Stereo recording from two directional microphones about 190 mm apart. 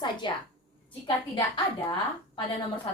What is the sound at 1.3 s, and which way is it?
Speech, 25° left (ahead or behind).